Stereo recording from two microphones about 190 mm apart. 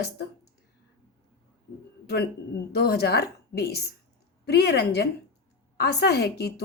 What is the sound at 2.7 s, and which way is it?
Speech, 60° left (ahead or behind).